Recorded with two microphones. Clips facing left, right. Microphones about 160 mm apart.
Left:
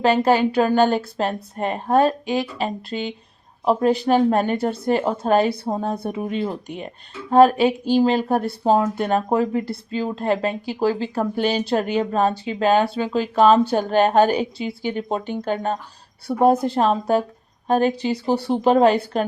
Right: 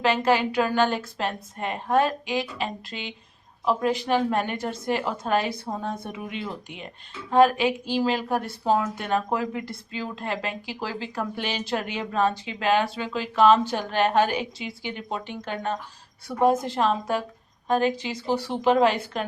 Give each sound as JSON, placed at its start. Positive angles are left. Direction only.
{"t": 0.0, "sound": "a woman's voice", "side_deg": 35}